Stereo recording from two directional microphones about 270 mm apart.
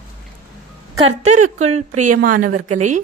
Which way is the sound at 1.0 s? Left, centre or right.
Right.